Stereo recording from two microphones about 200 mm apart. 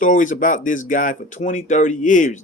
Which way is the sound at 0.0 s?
40° left (ahead or behind).